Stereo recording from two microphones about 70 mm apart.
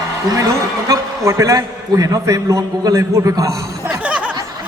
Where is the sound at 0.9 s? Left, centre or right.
Right.